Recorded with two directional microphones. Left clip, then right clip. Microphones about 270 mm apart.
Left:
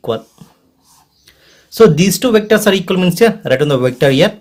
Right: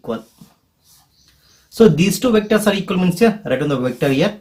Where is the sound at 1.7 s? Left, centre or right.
Left.